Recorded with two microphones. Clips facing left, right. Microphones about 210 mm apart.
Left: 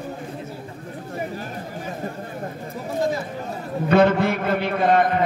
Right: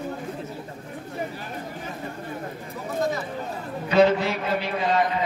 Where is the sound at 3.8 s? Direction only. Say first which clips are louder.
Left 2 dB; 55° left (ahead or behind).